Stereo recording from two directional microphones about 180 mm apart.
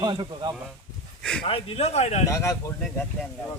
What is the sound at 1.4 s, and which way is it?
Speech, 30° left (ahead or behind).